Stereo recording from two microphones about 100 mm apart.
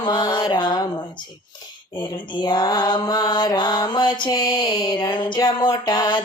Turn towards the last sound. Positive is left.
turn(degrees=50)  # may be behind; listen again after turning